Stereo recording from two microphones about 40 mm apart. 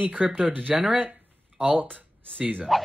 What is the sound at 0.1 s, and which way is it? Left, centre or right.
Speech, right.